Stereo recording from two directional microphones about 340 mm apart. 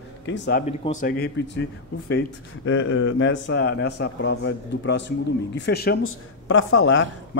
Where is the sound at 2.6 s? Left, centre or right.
Left.